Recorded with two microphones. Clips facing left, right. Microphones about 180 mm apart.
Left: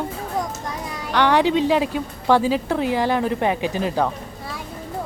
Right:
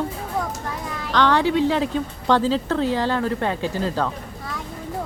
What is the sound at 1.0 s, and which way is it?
Speech, 10° left (ahead or behind).